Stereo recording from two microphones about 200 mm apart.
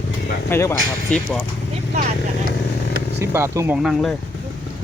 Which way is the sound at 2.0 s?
35° right (ahead or behind).